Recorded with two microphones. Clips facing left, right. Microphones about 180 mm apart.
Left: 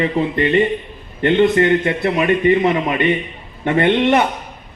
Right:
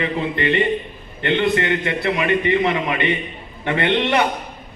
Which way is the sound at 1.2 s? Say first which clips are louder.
Left 6 dB; 45° left (ahead or behind).